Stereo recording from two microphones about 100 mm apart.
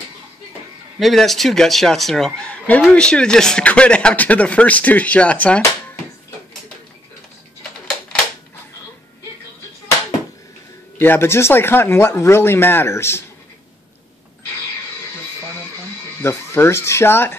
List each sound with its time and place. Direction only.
0.9 s speech: centre (ahead or behind)
11.0 s speech: 25° left (ahead or behind)
16.2 s speech: 25° left (ahead or behind)